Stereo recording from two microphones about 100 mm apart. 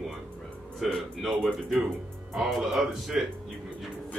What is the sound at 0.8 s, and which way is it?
A man's voice, centre (ahead or behind).